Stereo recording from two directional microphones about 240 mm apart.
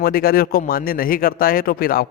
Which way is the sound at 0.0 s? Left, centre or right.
Left.